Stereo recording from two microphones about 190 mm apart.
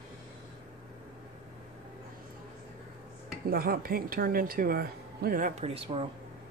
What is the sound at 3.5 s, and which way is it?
Speech, 50° right (ahead or behind).